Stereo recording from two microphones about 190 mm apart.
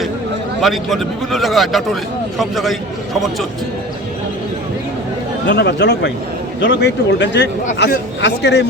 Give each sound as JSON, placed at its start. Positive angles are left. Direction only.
{"t": 0.6, "sound": "a man's voice", "side_deg": 0}
{"t": 5.5, "sound": "speech", "side_deg": 65}